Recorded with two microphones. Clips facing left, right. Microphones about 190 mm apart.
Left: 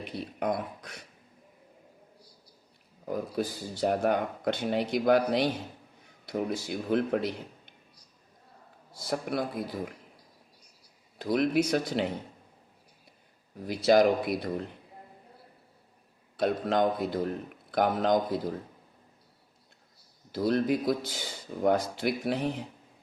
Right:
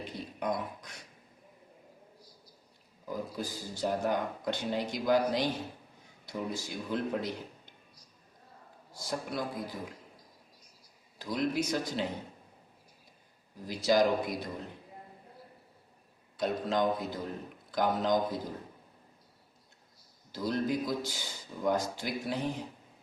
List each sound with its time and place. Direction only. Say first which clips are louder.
0.3 s speech: left 3 dB; 60° left (ahead or behind)
3.1 s speech: left 6 dB; 60° left (ahead or behind)
9.0 s speech: left 5 dB; 60° left (ahead or behind)
11.2 s speech: left 6 dB; 65° left (ahead or behind)
13.7 s speech: left 4 dB; 60° left (ahead or behind)
16.4 s speech: left 4 dB; 60° left (ahead or behind)
20.3 s speech: left 5 dB; 65° left (ahead or behind)